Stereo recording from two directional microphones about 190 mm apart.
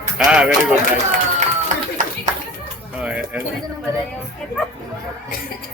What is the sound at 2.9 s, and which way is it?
Speech, 5° right (ahead or behind).